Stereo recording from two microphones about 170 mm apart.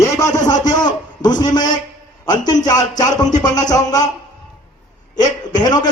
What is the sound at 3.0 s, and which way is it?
A man's voice, 20° left (ahead or behind).